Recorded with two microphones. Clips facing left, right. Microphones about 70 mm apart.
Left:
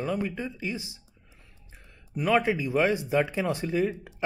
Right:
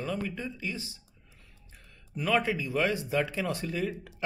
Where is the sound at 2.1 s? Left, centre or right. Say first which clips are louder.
Left 4 dB; centre.